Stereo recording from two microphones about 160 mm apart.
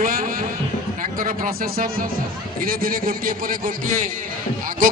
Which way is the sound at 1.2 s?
60° right (ahead or behind).